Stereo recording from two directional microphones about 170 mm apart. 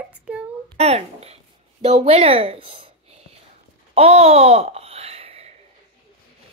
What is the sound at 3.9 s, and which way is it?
Babbling, 35° right (ahead or behind).